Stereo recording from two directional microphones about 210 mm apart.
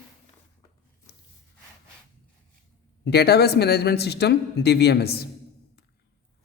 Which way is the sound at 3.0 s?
50° left (ahead or behind).